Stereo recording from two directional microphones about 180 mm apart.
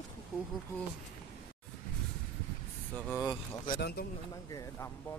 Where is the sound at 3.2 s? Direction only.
20° left (ahead or behind).